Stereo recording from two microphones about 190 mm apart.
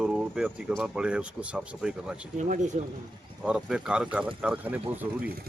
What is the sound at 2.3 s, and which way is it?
Speech, 40° right (ahead or behind).